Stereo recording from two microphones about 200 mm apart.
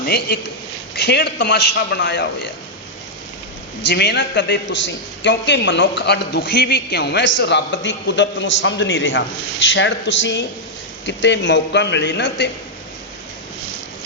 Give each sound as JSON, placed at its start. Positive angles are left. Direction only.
{"t": 0.0, "sound": "a man's voice", "side_deg": 55}
{"t": 3.8, "sound": "a man's voice", "side_deg": 55}